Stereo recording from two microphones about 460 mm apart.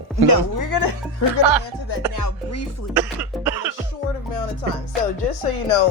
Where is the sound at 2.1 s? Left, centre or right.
Left.